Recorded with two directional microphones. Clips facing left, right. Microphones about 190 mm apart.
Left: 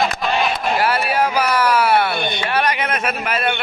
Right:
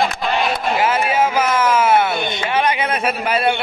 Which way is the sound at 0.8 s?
20° right (ahead or behind).